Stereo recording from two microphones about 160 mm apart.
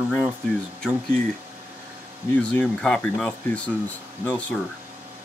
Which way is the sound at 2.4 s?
5° left (ahead or behind).